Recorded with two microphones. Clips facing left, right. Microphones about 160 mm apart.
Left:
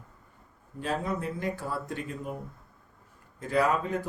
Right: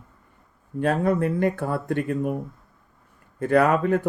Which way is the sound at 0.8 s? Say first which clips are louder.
Right 10 dB; 60° right (ahead or behind).